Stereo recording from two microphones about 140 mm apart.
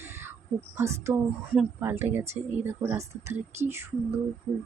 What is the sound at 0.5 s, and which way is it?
Speech, 20° right (ahead or behind).